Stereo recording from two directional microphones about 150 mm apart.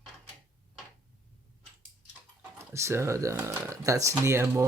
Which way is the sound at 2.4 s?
20° right (ahead or behind).